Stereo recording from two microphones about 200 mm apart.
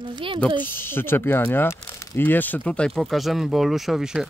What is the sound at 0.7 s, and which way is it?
Speech, 10° left (ahead or behind).